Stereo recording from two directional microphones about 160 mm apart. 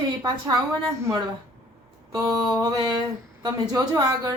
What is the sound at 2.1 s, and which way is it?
Speech, 20° right (ahead or behind).